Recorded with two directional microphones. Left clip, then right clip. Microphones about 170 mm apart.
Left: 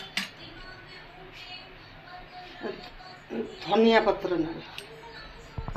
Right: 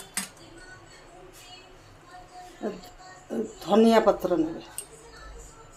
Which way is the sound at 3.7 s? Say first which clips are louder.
Right 2 dB; 90° right.